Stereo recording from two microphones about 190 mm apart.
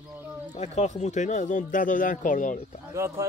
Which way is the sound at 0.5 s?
35° left (ahead or behind).